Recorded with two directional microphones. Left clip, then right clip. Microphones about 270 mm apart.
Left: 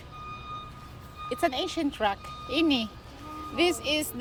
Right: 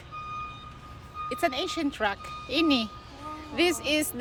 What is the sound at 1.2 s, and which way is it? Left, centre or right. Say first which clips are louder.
Speech: even; centre.